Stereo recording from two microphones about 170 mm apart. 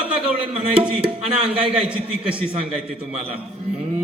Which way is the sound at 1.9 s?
5° right (ahead or behind).